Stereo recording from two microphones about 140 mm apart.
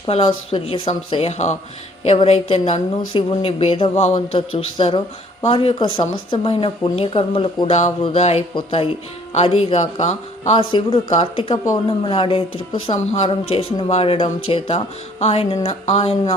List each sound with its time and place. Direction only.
0.1 s speech: 45° left (ahead or behind)
11.5 s speech: 25° left (ahead or behind)
11.9 s speech: 40° left (ahead or behind)